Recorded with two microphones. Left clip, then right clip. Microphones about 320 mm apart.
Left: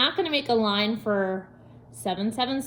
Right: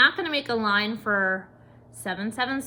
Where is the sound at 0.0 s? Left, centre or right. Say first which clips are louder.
Right 3 dB; centre.